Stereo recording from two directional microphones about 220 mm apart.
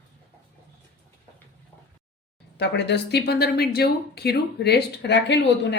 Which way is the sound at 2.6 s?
50° left (ahead or behind).